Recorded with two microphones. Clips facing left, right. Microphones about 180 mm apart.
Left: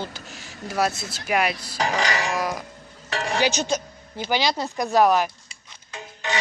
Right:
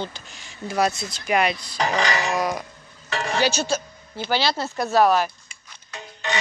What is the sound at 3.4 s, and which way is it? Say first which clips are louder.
A man's voice: right 1 dB; 15° left (ahead or behind).